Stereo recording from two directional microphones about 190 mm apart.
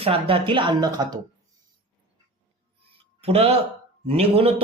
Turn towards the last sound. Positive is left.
turn(degrees=-30)  # may be behind; listen again after turning